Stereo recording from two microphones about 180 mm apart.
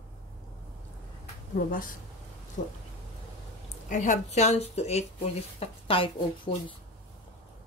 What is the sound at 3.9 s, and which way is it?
Speech, 45° left (ahead or behind).